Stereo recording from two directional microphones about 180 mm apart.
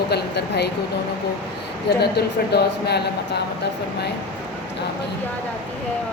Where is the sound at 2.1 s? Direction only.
65° left (ahead or behind).